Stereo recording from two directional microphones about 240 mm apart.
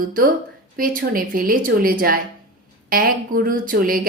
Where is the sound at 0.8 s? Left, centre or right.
Right.